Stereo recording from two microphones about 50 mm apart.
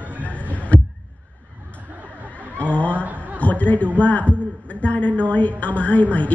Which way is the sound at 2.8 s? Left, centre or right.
Left.